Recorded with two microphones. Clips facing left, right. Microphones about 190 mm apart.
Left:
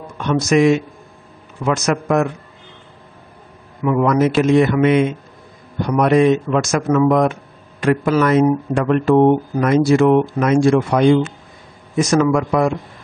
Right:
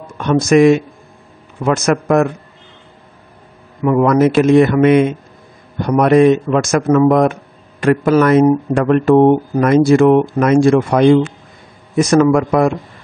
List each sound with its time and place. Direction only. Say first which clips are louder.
0.2 s speech: right 4 dB; 50° right (ahead or behind)
1.9 s speech: right 4 dB; 50° right (ahead or behind)
3.8 s speech: right 4 dB; 50° right (ahead or behind)